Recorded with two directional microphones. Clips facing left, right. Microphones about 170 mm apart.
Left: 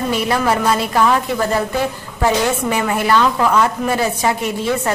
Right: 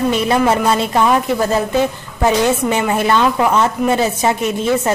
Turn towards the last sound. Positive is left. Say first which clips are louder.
# right 3 dB
turn(degrees=-20)  # may be behind; listen again after turning